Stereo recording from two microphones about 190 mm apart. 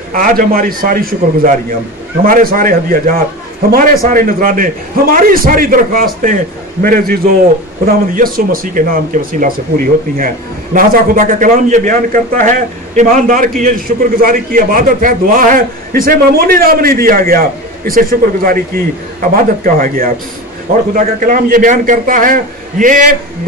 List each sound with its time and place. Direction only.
0.1 s speech: 45° right (ahead or behind)